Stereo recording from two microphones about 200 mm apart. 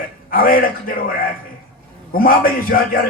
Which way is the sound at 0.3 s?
45° left (ahead or behind).